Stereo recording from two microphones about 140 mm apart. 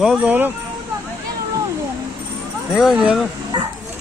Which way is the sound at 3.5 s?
30° right (ahead or behind).